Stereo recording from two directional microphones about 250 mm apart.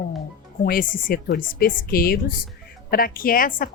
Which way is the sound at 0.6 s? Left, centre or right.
Left.